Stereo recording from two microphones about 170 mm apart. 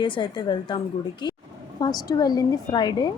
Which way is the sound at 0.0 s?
30° left (ahead or behind).